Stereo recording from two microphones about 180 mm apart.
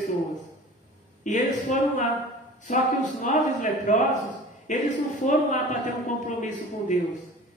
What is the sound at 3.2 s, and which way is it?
Speech, 45° left (ahead or behind).